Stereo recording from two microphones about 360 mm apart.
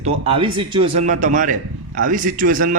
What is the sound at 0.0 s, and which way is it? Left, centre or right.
A man's voice, centre.